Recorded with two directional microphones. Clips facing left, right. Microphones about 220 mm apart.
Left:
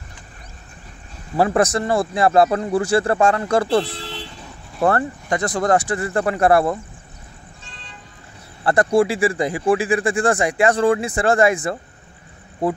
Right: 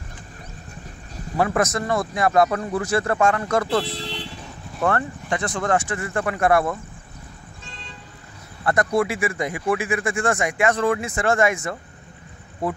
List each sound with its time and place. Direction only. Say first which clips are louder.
1.3 s speech: left 4 dB; 30° left (ahead or behind)
4.8 s speech: left 4 dB; 35° left (ahead or behind)
8.6 s speech: left 4 dB; 30° left (ahead or behind)